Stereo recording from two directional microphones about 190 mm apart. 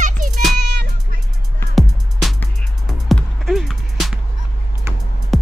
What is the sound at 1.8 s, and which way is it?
Music, centre (ahead or behind).